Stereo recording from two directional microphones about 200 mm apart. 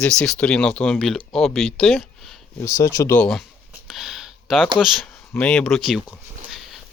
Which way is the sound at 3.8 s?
Centre (ahead or behind).